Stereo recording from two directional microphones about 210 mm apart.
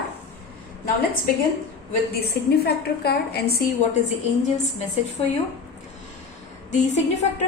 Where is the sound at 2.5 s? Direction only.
50° left (ahead or behind).